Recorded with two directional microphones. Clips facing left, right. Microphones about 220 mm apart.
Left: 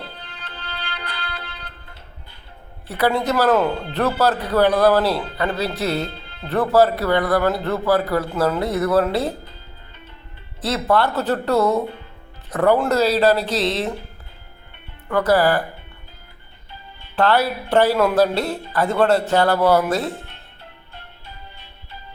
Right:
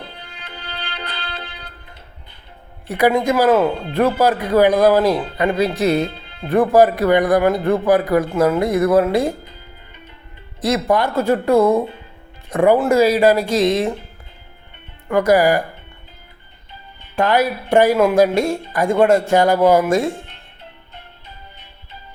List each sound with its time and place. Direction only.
0.2 s music: 10° right (ahead or behind)
2.8 s speech: 15° right (ahead or behind)
10.6 s speech: 15° right (ahead or behind)
15.1 s speech: 10° right (ahead or behind)
17.2 s speech: 10° right (ahead or behind)